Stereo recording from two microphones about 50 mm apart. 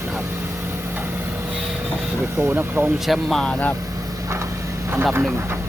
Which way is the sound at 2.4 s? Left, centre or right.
Right.